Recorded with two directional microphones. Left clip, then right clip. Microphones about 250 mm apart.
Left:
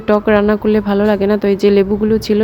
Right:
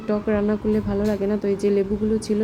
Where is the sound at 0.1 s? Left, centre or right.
Left.